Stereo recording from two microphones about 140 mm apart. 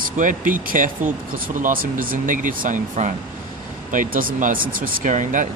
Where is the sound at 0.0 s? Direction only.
70° right (ahead or behind).